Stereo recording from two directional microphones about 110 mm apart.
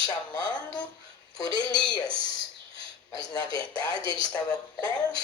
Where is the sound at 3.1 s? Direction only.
40° left (ahead or behind).